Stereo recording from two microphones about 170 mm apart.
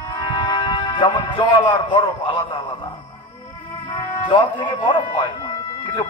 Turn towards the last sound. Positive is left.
turn(degrees=30)  # may be behind; listen again after turning